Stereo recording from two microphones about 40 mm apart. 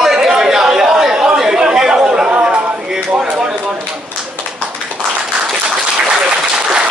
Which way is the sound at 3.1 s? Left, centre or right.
Right.